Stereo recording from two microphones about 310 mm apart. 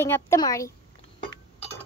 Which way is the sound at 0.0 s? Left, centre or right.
Centre.